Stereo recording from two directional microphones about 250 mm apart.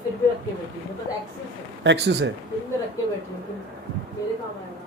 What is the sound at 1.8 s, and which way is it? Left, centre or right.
Speech, right.